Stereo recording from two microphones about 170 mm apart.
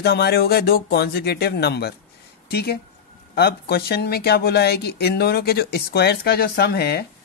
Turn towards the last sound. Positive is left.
turn(degrees=70)  # may be behind; listen again after turning